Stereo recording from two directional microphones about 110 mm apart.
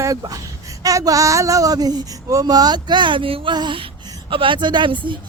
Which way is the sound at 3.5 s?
45° right (ahead or behind).